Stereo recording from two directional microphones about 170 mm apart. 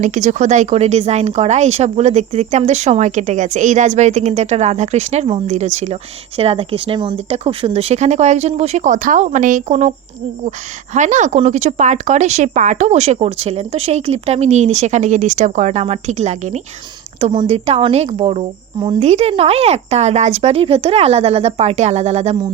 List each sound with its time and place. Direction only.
0.0 s speech: 45° right (ahead or behind)
10.9 s speech: 45° right (ahead or behind)